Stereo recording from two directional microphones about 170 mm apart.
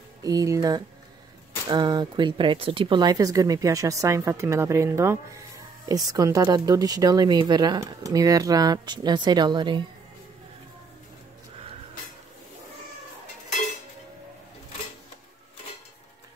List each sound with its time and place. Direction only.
0.2 s speech: 20° right (ahead or behind)